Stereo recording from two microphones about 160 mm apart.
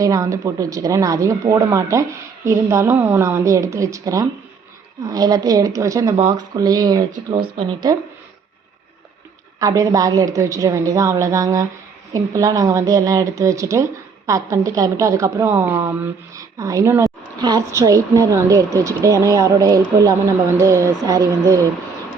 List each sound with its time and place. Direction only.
0.0 s speech: 20° right (ahead or behind)
9.6 s speech: 20° right (ahead or behind)